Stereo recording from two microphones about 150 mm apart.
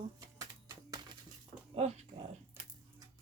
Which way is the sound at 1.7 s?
45° right (ahead or behind).